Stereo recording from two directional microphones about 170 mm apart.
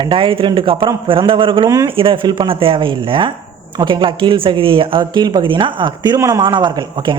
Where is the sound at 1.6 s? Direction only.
20° right (ahead or behind).